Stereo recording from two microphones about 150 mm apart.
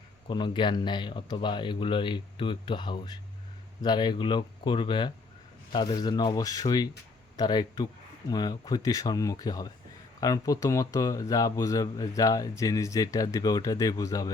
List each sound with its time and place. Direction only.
0.3 s speech: 30° left (ahead or behind)